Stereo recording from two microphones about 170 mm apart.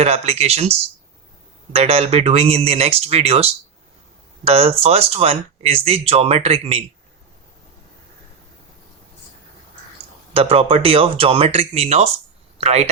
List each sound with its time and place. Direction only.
0.0 s speech: 40° right (ahead or behind)
10.3 s speech: 35° right (ahead or behind)